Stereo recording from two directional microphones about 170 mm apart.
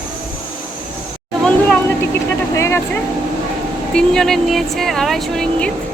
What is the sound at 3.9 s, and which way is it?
Speech, 5° left (ahead or behind).